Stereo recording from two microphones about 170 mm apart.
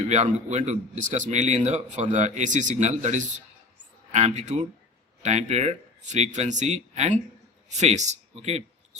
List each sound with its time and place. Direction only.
0.0 s a man's voice: 45° right (ahead or behind)